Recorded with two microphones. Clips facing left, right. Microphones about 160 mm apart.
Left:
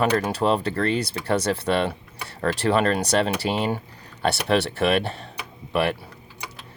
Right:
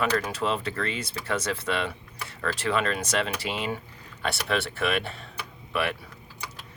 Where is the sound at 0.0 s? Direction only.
35° left (ahead or behind).